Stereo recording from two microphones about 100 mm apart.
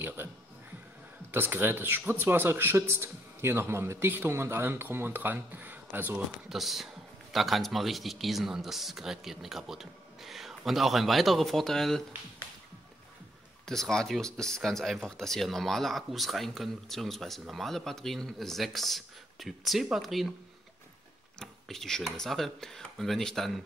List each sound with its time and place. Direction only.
0.0 s a man's voice: 20° right (ahead or behind)
1.3 s a man's voice: 20° right (ahead or behind)
6.5 s speech: centre (ahead or behind)
13.7 s speech: 5° left (ahead or behind)
21.4 s speech: 5° left (ahead or behind)